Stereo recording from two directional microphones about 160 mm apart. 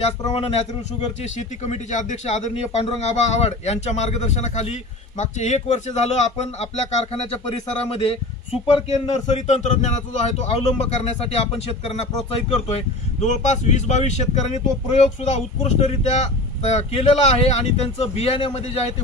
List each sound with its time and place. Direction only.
0.3 s a man's voice: 40° left (ahead or behind)